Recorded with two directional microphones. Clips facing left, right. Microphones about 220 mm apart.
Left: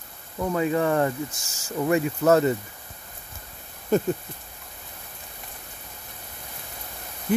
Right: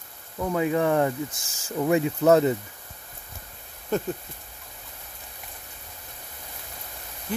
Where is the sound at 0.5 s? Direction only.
10° right (ahead or behind).